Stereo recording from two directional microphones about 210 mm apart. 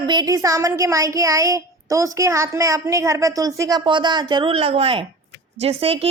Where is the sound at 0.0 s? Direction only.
20° right (ahead or behind).